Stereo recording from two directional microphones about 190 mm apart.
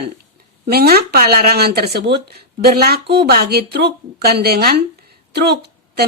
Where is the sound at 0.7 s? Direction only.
55° right (ahead or behind).